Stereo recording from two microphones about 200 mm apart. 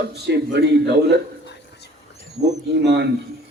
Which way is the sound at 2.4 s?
60° right (ahead or behind).